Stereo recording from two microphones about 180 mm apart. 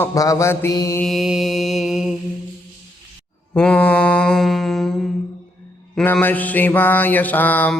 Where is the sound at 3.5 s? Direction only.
5° left (ahead or behind).